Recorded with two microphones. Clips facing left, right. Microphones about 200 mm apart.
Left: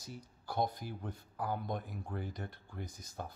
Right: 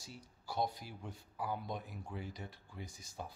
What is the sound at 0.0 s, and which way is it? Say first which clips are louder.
Speech: left 4 dB; 50° left (ahead or behind).